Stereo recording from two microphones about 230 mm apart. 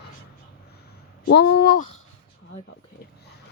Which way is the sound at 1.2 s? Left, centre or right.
Left.